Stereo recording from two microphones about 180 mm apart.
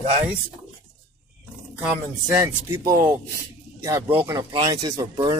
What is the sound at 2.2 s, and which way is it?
Speech, 20° right (ahead or behind).